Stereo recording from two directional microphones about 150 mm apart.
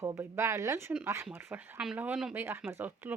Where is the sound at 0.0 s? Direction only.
20° right (ahead or behind).